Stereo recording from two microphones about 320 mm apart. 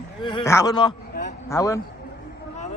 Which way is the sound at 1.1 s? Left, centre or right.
Left.